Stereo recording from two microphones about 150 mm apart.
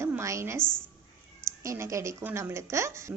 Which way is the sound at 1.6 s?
20° right (ahead or behind).